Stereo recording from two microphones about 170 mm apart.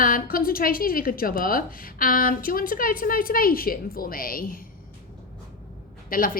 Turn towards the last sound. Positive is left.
turn(degrees=55)  # may be behind; listen again after turning